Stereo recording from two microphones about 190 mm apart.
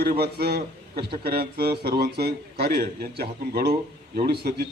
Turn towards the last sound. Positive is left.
turn(degrees=-60)  # may be behind; listen again after turning